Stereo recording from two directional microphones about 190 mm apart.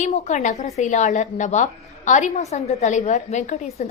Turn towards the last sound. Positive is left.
turn(degrees=40)  # may be behind; listen again after turning